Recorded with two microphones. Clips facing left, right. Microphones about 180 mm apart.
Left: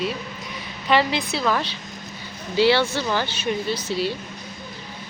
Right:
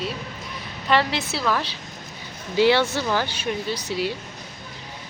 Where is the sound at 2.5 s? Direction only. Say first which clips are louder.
Even; 15° right (ahead or behind).